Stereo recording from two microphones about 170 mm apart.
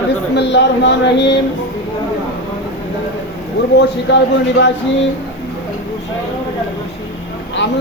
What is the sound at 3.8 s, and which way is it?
Speech, 90° left.